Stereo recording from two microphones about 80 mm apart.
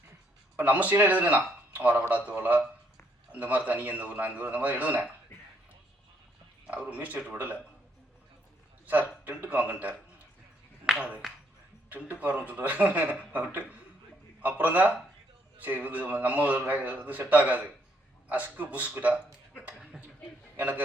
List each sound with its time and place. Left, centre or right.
0.5 s a man's voice: centre
6.7 s a man's voice: centre
8.9 s a man's voice: centre
10.9 s a man's voice: centre
20.6 s a man's voice: centre